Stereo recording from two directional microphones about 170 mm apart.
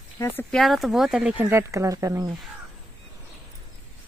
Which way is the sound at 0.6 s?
Centre (ahead or behind).